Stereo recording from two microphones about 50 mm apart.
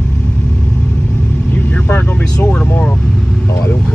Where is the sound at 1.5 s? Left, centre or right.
Left.